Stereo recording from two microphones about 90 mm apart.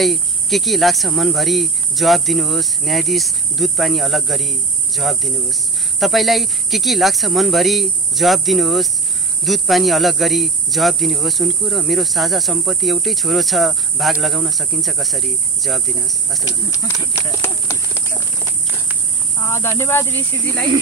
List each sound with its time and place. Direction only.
0.0 s speech: centre (ahead or behind)
16.8 s speech: 35° left (ahead or behind)
19.3 s speech: 30° left (ahead or behind)